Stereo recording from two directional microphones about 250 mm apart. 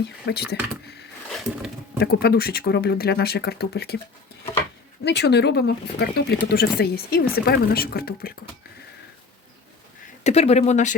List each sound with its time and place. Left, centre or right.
0.0 s speech: left
2.0 s speech: left
5.0 s speech: left
10.2 s speech: left